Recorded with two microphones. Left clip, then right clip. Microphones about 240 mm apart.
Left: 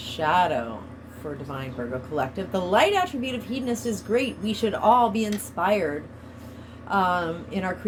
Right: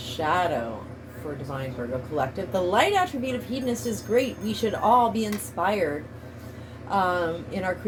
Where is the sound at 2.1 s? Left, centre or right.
Left.